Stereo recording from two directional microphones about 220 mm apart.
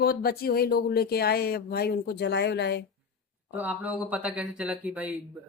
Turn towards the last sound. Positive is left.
turn(degrees=-5)  # may be behind; listen again after turning